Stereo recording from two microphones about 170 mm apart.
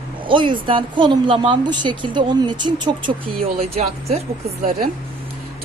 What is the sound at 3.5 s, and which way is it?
Speech, 35° right (ahead or behind).